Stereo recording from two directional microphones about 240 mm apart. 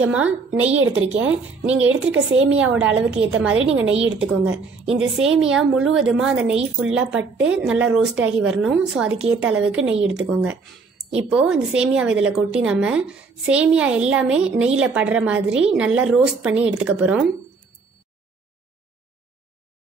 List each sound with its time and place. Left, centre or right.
0.1 s a woman's voice: centre
0.7 s a woman's voice: right
2.0 s a woman's voice: centre